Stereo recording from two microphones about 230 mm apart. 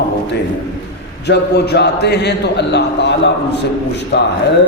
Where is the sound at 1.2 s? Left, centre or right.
Left.